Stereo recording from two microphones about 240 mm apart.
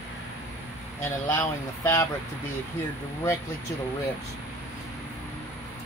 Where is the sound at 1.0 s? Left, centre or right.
Centre.